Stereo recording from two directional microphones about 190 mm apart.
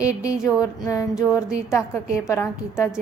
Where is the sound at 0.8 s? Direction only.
15° left (ahead or behind).